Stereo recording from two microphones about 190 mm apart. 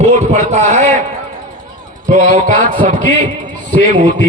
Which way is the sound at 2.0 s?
40° right (ahead or behind).